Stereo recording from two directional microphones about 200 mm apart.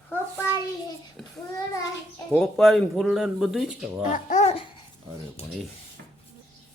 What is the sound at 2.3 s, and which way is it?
Speech, centre (ahead or behind).